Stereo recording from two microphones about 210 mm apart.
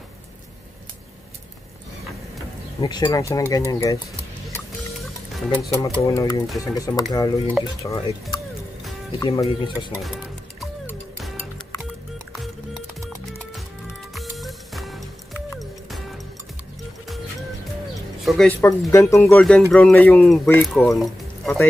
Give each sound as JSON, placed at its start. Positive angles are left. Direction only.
{"t": 2.8, "sound": "speech", "side_deg": 20}
{"t": 5.3, "sound": "speech", "side_deg": 0}
{"t": 5.7, "sound": "speech", "side_deg": 15}
{"t": 10.0, "sound": "music", "side_deg": 0}
{"t": 13.8, "sound": "music", "side_deg": 0}
{"t": 18.2, "sound": "music", "side_deg": 0}
{"t": 18.6, "sound": "speech", "side_deg": 15}